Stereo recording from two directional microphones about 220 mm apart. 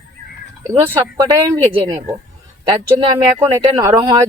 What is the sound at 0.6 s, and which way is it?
Speech, 10° right (ahead or behind).